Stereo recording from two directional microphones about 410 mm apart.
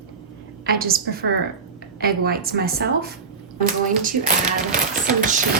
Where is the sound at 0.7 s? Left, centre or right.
Right.